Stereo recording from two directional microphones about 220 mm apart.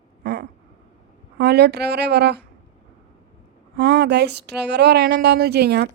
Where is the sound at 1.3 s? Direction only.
50° right (ahead or behind).